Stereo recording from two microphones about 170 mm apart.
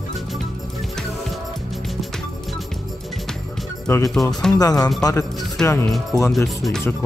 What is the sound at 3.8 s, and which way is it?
Speech, 20° left (ahead or behind).